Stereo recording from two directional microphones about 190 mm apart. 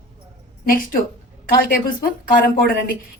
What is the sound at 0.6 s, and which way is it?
A woman's voice, 45° left (ahead or behind).